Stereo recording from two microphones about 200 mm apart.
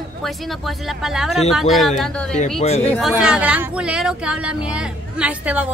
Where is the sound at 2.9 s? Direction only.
Centre (ahead or behind).